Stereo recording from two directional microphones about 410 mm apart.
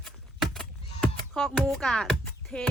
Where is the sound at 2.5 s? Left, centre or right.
Centre.